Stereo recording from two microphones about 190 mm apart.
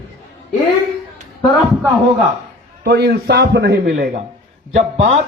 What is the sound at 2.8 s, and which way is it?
A man's voice, 60° right (ahead or behind).